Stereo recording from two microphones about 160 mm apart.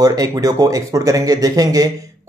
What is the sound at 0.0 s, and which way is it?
Speech, 25° right (ahead or behind).